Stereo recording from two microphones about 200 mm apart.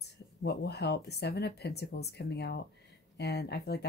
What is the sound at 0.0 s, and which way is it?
Speech, 55° left (ahead or behind).